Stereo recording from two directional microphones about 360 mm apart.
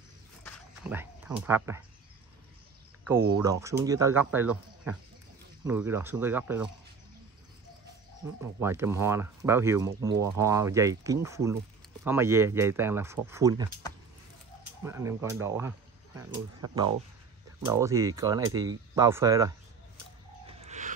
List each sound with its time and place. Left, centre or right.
0.4 s a sound: centre
0.9 s speech: centre
3.3 s speech: centre
8.4 s speech: centre
14.8 s speech: centre
20.5 s whale vocalization: centre